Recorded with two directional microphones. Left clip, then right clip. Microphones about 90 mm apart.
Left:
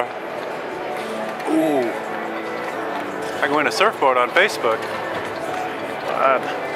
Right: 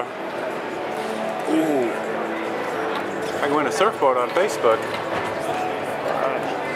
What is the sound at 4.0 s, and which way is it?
Speech, 25° left (ahead or behind).